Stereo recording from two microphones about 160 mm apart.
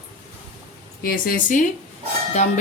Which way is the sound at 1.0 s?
65° left (ahead or behind).